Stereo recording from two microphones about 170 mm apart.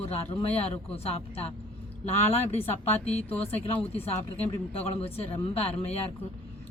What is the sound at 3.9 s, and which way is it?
A man's voice, 35° left (ahead or behind).